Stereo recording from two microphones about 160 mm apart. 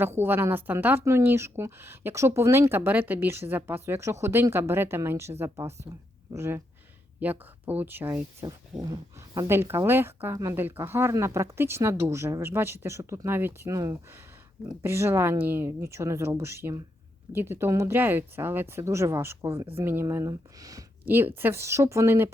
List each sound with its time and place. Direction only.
0.0 s speech: 15° right (ahead or behind)